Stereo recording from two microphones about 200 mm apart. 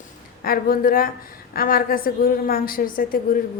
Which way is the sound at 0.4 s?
45° left (ahead or behind).